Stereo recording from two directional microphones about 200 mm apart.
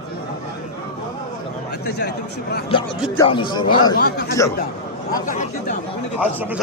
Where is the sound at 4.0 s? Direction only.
55° left (ahead or behind).